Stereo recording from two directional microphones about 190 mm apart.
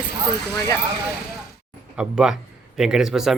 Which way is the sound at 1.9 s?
5° right (ahead or behind).